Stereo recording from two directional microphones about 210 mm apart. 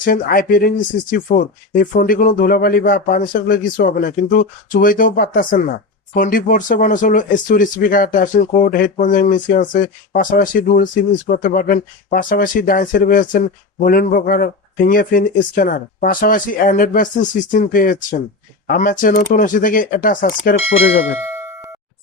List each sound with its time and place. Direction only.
0.0 s speech: 40° left (ahead or behind)